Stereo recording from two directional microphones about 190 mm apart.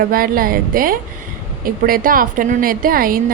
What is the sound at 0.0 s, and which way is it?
A woman's voice, 50° right (ahead or behind).